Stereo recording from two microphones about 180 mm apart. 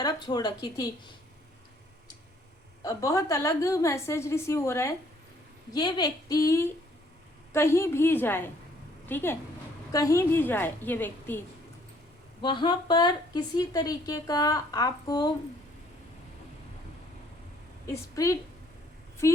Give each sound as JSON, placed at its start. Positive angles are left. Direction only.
{"t": 0.0, "sound": "speech", "side_deg": 20}
{"t": 2.8, "sound": "a woman's voice", "side_deg": 20}
{"t": 12.4, "sound": "a woman's voice", "side_deg": 25}
{"t": 18.1, "sound": "a woman's voice", "side_deg": 15}